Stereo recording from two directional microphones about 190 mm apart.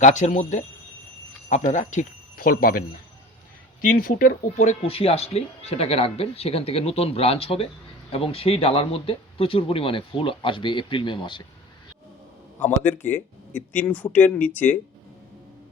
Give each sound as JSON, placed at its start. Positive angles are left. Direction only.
{"t": 0.0, "sound": "speech", "side_deg": 40}
{"t": 12.5, "sound": "speech", "side_deg": 10}